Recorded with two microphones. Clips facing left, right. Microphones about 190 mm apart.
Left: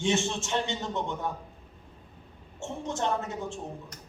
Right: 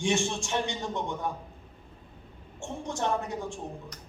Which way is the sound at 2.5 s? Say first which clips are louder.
Left 1 dB; 15° right (ahead or behind).